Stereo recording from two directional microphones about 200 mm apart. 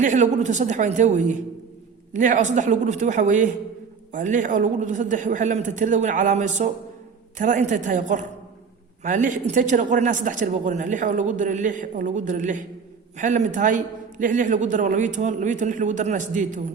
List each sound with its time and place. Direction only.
0.0 s a woman's voice: 40° right (ahead or behind)